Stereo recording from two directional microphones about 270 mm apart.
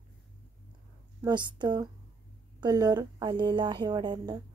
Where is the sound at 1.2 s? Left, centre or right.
Centre.